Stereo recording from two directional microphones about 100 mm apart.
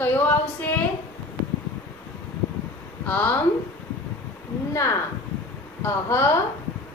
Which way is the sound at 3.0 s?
15° left (ahead or behind).